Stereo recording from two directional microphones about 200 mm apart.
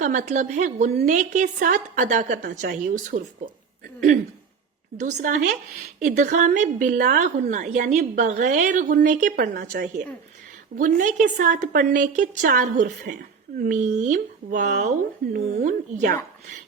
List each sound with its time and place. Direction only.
0.0 s a woman's voice: 35° right (ahead or behind)
4.9 s a woman's voice: 40° right (ahead or behind)
9.5 s a woman's voice: 55° right (ahead or behind)
10.8 s a woman's voice: 40° right (ahead or behind)